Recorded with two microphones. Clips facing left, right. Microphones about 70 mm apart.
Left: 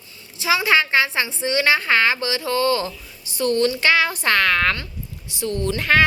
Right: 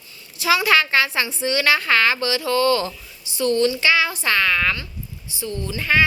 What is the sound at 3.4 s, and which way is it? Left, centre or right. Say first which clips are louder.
A woman's voice: even; left.